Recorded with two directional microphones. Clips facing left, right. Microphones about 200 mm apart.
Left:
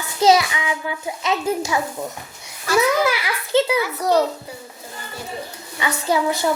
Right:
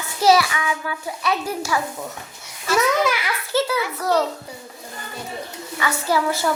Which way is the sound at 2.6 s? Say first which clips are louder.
Left 2 dB; centre (ahead or behind).